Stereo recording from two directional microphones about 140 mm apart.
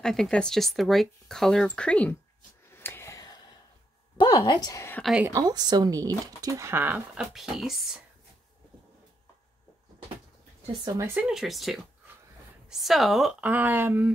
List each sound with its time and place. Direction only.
0.0 s speech: 5° left (ahead or behind)
2.7 s whispering: 15° left (ahead or behind)
4.2 s a woman's voice: 30° left (ahead or behind)
5.2 s speech: 25° right (ahead or behind); by 8.0 s centre (ahead or behind)
11.0 s speech: 10° right (ahead or behind)
13.4 s speech: 10° right (ahead or behind)